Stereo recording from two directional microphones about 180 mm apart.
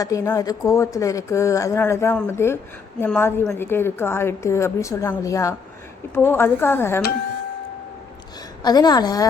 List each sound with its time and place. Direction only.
0.0 s a woman's voice: 20° left (ahead or behind)
8.6 s a woman's voice: 20° left (ahead or behind)